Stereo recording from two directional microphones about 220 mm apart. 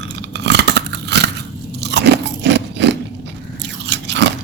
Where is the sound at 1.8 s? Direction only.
50° right (ahead or behind).